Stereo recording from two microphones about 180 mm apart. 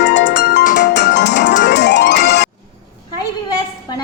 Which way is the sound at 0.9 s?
70° left (ahead or behind).